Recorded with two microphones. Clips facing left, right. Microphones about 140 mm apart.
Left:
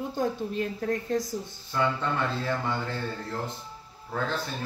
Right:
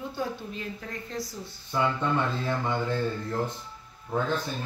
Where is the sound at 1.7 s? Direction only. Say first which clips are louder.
Even; 20° right (ahead or behind).